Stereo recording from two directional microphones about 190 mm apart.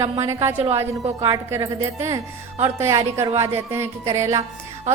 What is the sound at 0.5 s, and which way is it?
Speech, 30° right (ahead or behind).